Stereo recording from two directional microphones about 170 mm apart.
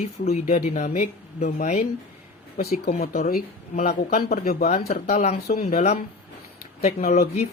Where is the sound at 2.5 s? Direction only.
60° left (ahead or behind).